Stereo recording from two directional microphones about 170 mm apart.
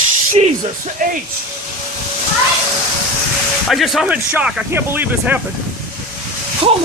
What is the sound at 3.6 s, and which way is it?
Speech, centre (ahead or behind).